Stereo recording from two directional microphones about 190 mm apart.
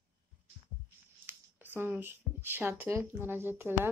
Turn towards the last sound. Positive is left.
turn(degrees=-10)  # may be behind; listen again after turning